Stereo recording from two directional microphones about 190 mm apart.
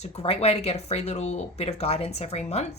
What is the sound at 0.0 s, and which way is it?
Speech, 35° left (ahead or behind).